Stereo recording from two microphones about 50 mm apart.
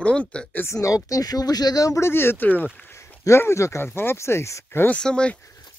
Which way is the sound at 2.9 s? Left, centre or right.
Left.